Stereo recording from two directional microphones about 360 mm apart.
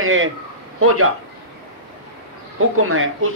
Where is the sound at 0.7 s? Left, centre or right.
Right.